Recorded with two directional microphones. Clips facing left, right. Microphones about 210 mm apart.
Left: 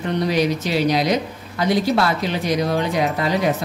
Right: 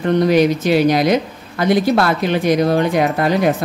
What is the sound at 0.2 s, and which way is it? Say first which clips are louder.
Speech: right 5 dB; 50° right (ahead or behind).